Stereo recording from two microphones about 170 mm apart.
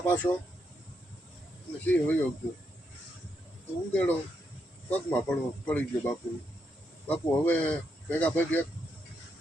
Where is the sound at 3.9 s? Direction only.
10° left (ahead or behind).